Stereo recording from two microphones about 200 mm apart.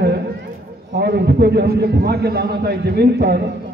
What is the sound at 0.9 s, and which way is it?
A man's voice, 55° right (ahead or behind).